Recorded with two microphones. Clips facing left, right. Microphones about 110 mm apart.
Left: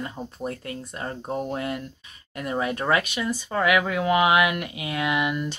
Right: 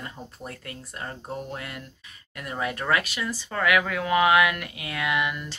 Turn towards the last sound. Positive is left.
turn(degrees=20)  # may be behind; listen again after turning